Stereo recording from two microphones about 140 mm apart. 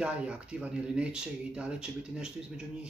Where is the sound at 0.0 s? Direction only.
10° right (ahead or behind).